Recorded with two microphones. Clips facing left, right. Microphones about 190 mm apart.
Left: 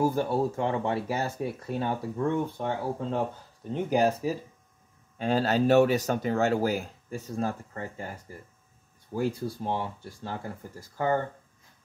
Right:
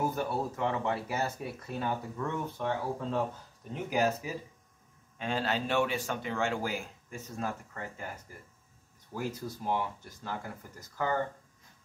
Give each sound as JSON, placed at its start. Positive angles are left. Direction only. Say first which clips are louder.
{"t": 0.0, "sound": "speech", "louder": "left 6 dB", "side_deg": 30}
{"t": 9.1, "sound": "speech", "louder": "left 7 dB", "side_deg": 30}